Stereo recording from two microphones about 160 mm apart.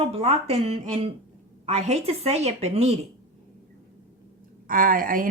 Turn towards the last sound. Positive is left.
turn(degrees=-60)  # may be behind; listen again after turning